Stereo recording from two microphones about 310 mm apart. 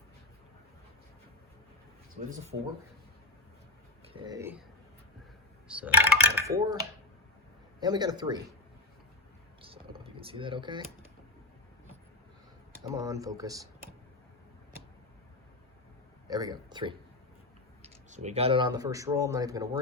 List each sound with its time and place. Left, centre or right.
2.3 s speech: right
4.1 s speech: centre
5.6 s speech: centre
7.8 s speech: centre
9.6 s computer keyboard: centre
12.8 s speech: centre
16.2 s speech: centre
18.1 s speech: right